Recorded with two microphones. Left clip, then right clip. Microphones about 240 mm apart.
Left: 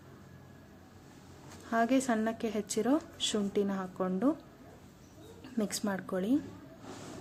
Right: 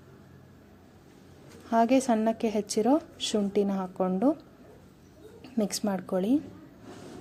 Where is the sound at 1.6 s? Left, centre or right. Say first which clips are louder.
Right 6 dB; centre.